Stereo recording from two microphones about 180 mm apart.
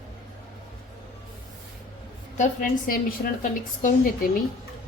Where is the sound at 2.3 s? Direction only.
45° left (ahead or behind).